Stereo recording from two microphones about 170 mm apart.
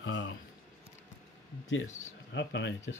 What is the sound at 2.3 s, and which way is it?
Speech, 90° left.